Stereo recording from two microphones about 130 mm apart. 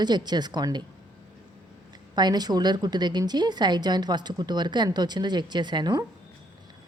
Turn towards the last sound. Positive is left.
turn(degrees=-35)  # may be behind; listen again after turning